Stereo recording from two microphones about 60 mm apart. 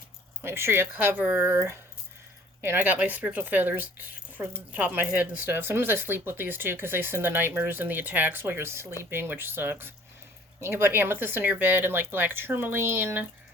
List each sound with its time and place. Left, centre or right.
0.4 s speech: right
0.9 s speech: right
1.5 s speech: right
2.7 s speech: right